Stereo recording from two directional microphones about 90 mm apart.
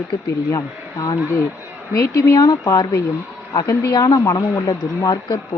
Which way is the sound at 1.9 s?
40° left (ahead or behind).